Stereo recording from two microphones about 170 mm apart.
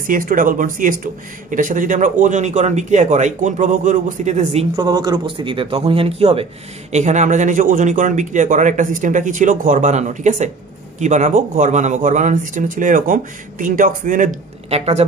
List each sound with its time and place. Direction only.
0.0 s speech: 55° right (ahead or behind)
4.7 s a man's voice: 25° right (ahead or behind); by 15.0 s 40° right (ahead or behind)